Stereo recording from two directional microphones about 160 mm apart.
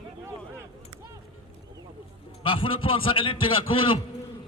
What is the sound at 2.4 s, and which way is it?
A man's voice, 35° left (ahead or behind).